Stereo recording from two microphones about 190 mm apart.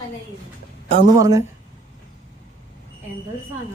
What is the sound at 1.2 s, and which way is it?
Speech, 15° right (ahead or behind).